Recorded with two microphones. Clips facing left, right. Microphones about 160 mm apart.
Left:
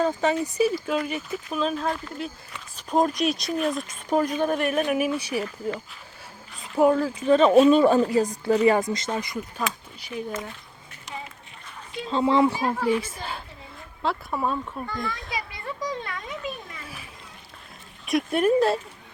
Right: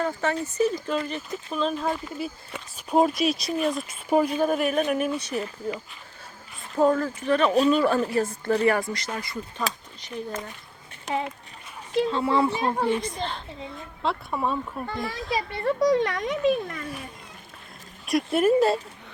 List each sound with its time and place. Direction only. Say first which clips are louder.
0.0 s speech: left 3 dB; 15° left (ahead or behind)
7.3 s speech: left 5 dB; 25° left (ahead or behind)
10.0 s speech: left 1 dB; 10° left (ahead or behind)
11.0 s speech: right 10 dB; 65° right (ahead or behind)
12.2 s speech: left 8 dB; 15° left (ahead or behind)
12.5 s a child's voice: right 1 dB; 20° right (ahead or behind)
12.8 s speech: even; 5° left (ahead or behind)
14.8 s a child's voice: even; 25° right (ahead or behind)
15.5 s a child's voice: right 15 dB; 65° right (ahead or behind)
18.0 s speech: even; centre (ahead or behind)